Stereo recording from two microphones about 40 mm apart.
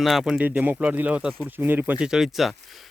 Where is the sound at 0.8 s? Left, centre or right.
Right.